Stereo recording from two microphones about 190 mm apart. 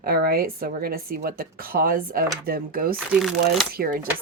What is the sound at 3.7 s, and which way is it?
Speech, 50° right (ahead or behind).